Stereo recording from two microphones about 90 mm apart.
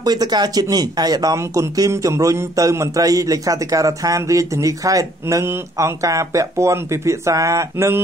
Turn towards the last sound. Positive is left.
turn(degrees=-30)  # may be behind; listen again after turning